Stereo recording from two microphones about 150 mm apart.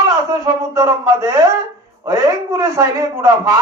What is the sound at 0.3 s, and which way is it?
A man's voice, 25° right (ahead or behind).